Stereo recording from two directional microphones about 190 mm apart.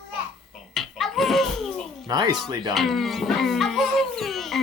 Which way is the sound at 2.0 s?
20° right (ahead or behind).